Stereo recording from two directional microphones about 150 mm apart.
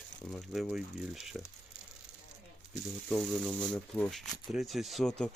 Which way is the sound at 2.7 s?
Centre (ahead or behind).